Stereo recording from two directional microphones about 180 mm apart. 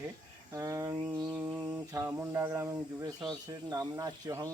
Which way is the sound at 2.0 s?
15° right (ahead or behind).